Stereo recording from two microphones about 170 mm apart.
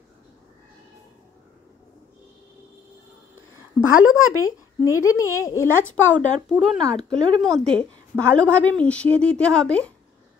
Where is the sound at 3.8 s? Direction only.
5° right (ahead or behind).